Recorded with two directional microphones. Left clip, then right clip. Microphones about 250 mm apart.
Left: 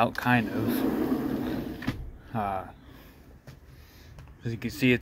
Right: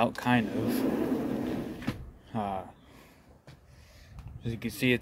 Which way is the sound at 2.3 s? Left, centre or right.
Centre.